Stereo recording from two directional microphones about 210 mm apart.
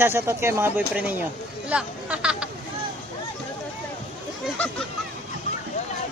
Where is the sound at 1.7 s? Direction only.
5° right (ahead or behind).